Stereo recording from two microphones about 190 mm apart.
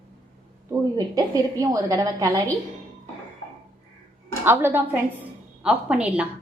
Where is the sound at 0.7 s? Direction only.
15° right (ahead or behind).